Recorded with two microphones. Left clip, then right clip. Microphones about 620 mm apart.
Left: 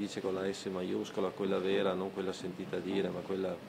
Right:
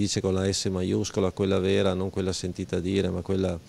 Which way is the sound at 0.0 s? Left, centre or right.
Right.